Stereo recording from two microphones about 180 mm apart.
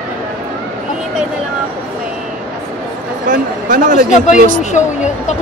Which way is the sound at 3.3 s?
50° right (ahead or behind).